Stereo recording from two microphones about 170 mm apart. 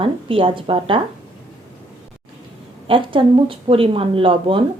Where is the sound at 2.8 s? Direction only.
30° right (ahead or behind).